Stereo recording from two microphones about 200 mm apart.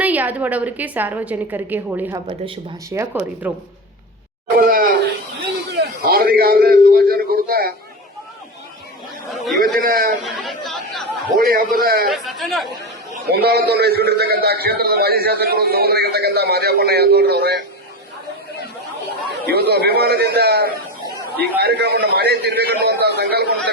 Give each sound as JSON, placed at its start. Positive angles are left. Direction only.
{"t": 0.0, "sound": "a woman's voice", "side_deg": -10}
{"t": 4.5, "sound": "speech", "side_deg": -45}
{"t": 5.7, "sound": "a sound", "side_deg": -50}
{"t": 9.3, "sound": "a sound", "side_deg": 0}
{"t": 9.6, "sound": "a man's voice", "side_deg": -45}
{"t": 10.2, "sound": "chatter", "side_deg": 0}
{"t": 11.3, "sound": "a man's voice", "side_deg": -45}
{"t": 12.1, "sound": "speech", "side_deg": 0}
{"t": 13.2, "sound": "a man's voice", "side_deg": -55}
{"t": 19.5, "sound": "a man's voice", "side_deg": -55}